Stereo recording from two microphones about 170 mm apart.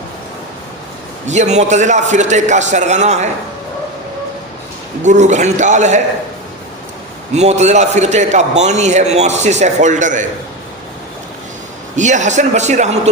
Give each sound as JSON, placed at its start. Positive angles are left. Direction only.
{"t": 1.3, "sound": "a man's voice", "side_deg": -40}
{"t": 5.0, "sound": "a man's voice", "side_deg": -45}
{"t": 7.3, "sound": "a man's voice", "side_deg": -40}
{"t": 11.9, "sound": "a man's voice", "side_deg": -45}